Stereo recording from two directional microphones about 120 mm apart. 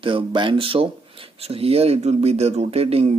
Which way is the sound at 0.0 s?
45° right (ahead or behind).